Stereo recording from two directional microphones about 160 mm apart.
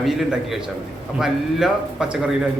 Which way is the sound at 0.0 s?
Centre (ahead or behind).